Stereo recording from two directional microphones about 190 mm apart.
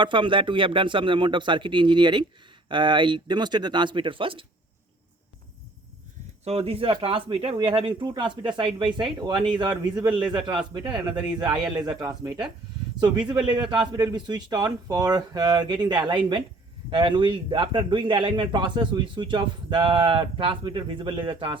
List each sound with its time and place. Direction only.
0.0 s a man's voice: 25° right (ahead or behind)
6.4 s a man's voice: 30° right (ahead or behind)